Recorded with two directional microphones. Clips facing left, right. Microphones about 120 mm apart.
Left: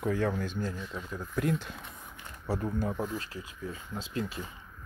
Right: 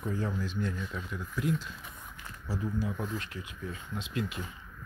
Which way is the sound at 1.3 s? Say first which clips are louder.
Left 2 dB; 55° left (ahead or behind).